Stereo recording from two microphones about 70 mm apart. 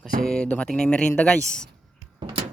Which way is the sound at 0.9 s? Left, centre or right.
Centre.